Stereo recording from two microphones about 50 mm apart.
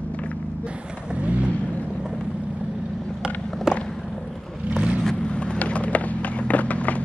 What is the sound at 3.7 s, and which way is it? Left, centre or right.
Vehicle, centre.